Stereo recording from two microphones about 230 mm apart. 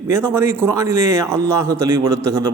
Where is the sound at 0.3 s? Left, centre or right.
Centre.